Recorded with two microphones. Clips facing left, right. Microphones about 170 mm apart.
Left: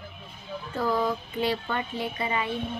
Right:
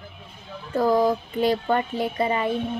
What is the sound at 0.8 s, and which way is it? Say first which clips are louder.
Speech: right 7 dB; 40° right (ahead or behind).